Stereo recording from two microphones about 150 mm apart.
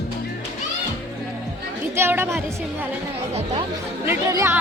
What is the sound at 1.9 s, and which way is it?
Music, 15° right (ahead or behind).